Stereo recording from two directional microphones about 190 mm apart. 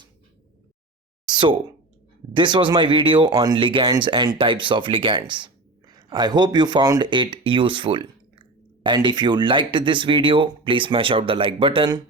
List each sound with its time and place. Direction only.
1.3 s speech: 25° right (ahead or behind)